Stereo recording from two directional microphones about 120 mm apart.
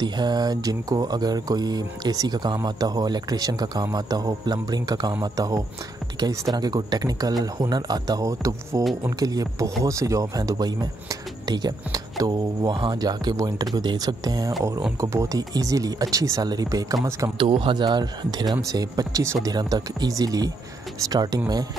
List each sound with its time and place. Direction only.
0.0 s speech: 35° right (ahead or behind)
17.4 s speech: 45° right (ahead or behind)